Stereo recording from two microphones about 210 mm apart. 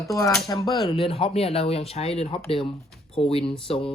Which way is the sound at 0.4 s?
20° left (ahead or behind).